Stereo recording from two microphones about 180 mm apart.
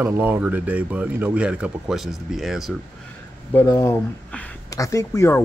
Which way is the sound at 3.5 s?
15° left (ahead or behind).